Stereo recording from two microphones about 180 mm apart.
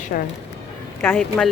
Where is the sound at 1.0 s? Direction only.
10° left (ahead or behind).